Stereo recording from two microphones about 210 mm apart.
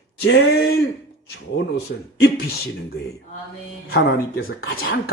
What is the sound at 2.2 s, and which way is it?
Speech, 50° left (ahead or behind).